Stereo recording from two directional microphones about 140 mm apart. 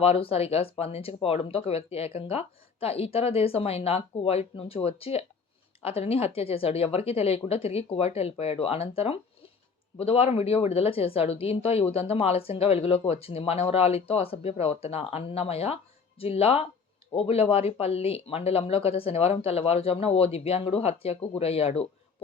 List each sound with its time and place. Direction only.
0.0 s speech: 45° left (ahead or behind)
10.0 s speech: 45° left (ahead or behind)